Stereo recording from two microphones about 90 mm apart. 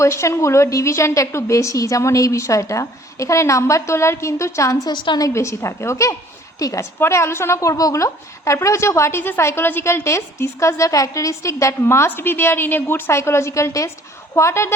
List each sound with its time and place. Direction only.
0.0 s a woman's voice: 30° left (ahead or behind)
4.9 s a woman's voice: 50° left (ahead or behind)
5.3 s a woman's voice: 30° left (ahead or behind)